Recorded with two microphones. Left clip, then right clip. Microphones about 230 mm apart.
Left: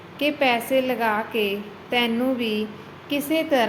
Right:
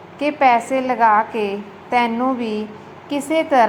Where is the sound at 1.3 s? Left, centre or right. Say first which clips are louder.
Right 2 dB; right.